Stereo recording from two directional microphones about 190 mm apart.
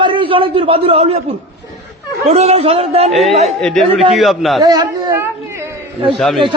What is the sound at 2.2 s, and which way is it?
Speech, 35° right (ahead or behind).